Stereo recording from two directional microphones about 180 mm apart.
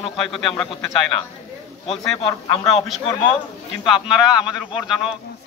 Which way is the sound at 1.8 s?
30° left (ahead or behind).